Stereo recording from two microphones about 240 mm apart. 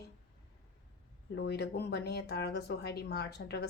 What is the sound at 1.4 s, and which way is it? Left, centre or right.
Speech, left.